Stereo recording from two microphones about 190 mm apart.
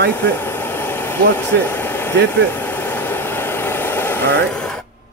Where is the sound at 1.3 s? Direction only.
10° left (ahead or behind).